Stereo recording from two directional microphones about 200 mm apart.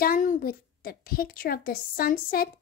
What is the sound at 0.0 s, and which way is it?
A woman's voice, 40° left (ahead or behind).